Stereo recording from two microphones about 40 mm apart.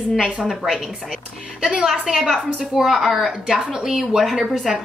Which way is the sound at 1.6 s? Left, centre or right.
Right.